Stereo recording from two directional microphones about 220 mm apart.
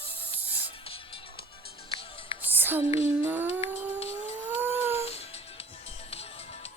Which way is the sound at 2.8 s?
25° left (ahead or behind).